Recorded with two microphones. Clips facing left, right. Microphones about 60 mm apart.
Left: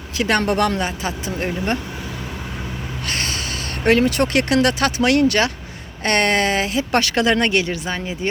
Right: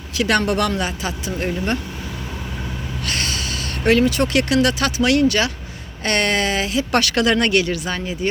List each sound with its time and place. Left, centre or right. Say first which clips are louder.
0.2 s speech: even; left
3.1 s speech: even; left
6.9 s speech: even; left